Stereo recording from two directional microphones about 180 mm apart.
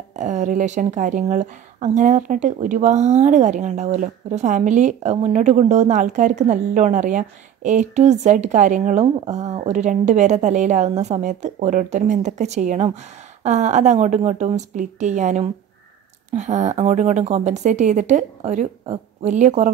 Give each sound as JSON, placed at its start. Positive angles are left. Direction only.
{"t": 0.1, "sound": "speech", "side_deg": -40}